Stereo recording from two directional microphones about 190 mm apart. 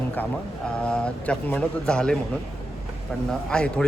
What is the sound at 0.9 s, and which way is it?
A man's voice, 5° left (ahead or behind).